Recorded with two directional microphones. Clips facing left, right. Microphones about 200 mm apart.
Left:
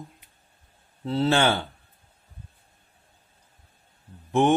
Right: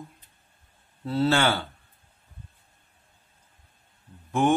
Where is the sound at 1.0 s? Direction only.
20° left (ahead or behind).